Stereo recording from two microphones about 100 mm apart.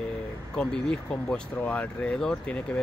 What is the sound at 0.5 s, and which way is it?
Speech, 10° left (ahead or behind).